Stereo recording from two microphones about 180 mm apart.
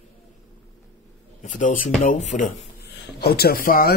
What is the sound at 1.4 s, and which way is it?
Speech, 45° left (ahead or behind).